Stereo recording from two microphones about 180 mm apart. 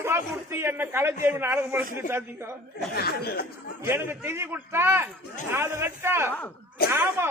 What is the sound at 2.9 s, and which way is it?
Speech, 60° left (ahead or behind).